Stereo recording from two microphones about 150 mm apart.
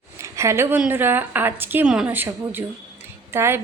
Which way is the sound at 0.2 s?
20° right (ahead or behind).